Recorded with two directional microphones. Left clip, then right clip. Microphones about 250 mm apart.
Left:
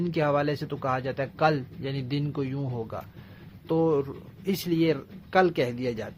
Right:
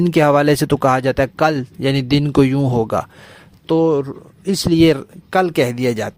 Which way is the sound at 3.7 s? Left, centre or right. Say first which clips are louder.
Right 9 dB; right.